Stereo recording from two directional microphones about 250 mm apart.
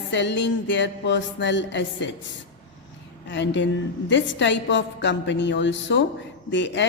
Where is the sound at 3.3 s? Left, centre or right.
Left.